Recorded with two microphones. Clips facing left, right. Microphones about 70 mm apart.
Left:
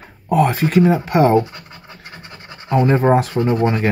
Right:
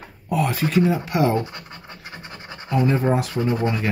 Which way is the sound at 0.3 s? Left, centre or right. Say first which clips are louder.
Left 6 dB; left.